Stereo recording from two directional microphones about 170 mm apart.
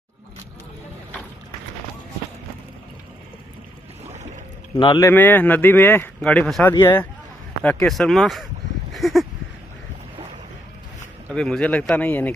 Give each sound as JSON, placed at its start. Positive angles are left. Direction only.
{"t": 4.7, "sound": "speech", "side_deg": 30}
{"t": 5.0, "sound": "speech", "side_deg": 10}
{"t": 8.9, "sound": "a sound", "side_deg": 0}
{"t": 11.3, "sound": "speech", "side_deg": 5}